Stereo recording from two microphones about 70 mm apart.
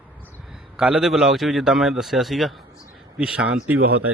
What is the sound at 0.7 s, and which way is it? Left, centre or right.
A man's voice, centre.